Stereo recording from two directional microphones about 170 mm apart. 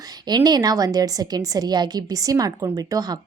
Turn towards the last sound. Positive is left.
turn(degrees=-20)  # may be behind; listen again after turning